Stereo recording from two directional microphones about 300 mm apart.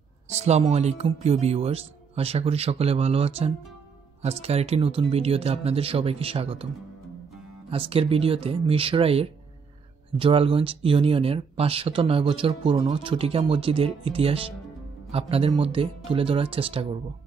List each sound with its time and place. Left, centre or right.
0.4 s speech: right
7.7 s speech: centre